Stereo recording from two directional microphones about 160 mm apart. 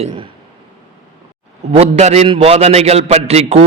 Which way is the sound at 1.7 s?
40° right (ahead or behind).